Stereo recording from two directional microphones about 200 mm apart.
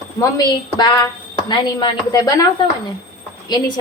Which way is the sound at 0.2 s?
15° left (ahead or behind).